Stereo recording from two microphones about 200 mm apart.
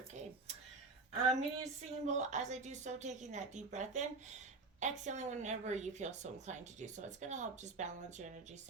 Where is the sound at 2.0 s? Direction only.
35° right (ahead or behind).